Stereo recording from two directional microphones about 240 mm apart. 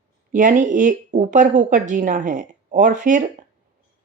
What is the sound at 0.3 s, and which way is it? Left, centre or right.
Speech, right.